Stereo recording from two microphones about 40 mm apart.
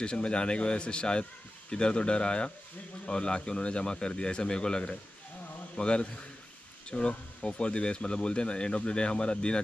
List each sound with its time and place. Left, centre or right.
0.0 s speech: left